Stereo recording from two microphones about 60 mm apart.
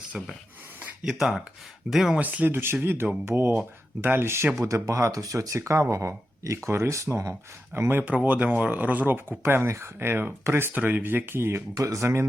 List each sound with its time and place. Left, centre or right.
1.0 s speech: centre
2.1 s speech: right
2.8 s speech: right
4.6 s speech: right
7.7 s speech: right
8.1 s speech: right
9.6 s speech: right
10.0 s speech: right
11.7 s speech: right
12.0 s speech: right